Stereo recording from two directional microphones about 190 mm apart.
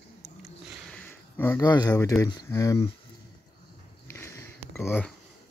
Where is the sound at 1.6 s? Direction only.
20° left (ahead or behind).